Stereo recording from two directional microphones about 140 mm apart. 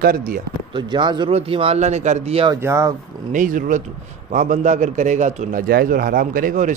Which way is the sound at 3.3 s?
70° right (ahead or behind).